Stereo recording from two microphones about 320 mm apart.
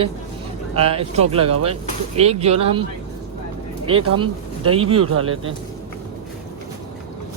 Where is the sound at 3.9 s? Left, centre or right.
Right.